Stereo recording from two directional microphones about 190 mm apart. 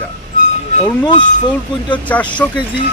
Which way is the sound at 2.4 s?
10° left (ahead or behind).